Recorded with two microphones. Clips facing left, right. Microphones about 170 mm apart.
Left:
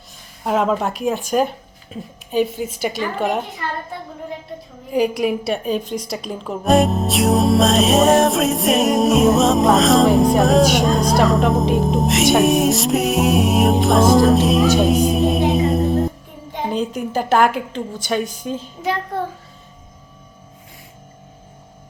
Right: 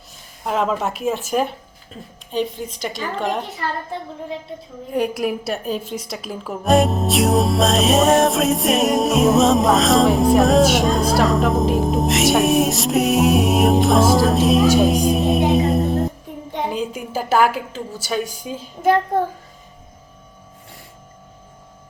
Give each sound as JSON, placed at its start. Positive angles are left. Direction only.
{"t": 0.4, "sound": "a woman's voice", "side_deg": 0}
{"t": 4.9, "sound": "a woman's voice", "side_deg": 0}
{"t": 18.8, "sound": "child singing", "side_deg": -50}